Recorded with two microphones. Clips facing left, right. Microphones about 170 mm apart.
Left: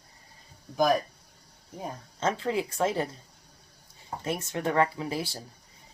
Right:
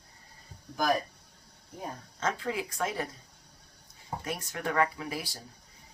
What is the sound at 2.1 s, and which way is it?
Speech, 25° left (ahead or behind).